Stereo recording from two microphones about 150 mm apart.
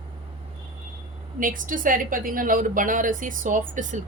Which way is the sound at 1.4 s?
65° right (ahead or behind).